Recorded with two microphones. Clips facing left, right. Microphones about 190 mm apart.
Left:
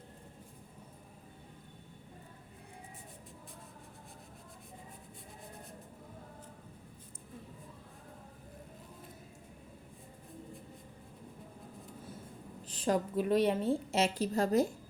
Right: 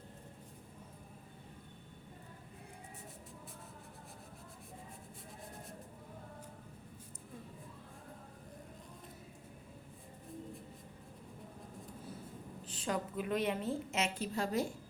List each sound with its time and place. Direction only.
12.6 s a woman's voice: 40° left (ahead or behind)